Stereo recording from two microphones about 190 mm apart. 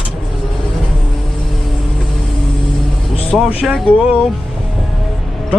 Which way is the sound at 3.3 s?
Centre (ahead or behind).